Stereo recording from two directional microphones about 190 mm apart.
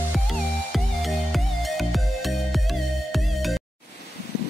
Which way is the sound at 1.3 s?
Centre (ahead or behind).